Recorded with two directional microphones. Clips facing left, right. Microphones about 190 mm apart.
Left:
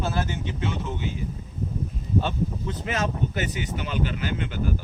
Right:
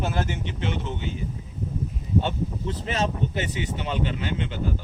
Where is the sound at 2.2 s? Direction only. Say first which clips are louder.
Even; 30° right (ahead or behind).